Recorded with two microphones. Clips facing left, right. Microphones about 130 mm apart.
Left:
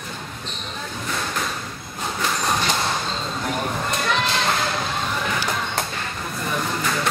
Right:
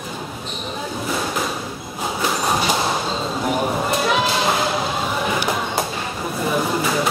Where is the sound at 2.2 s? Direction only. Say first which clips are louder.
Right 3 dB; 10° right (ahead or behind).